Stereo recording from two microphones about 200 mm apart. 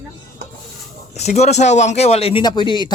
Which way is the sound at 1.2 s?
35° left (ahead or behind).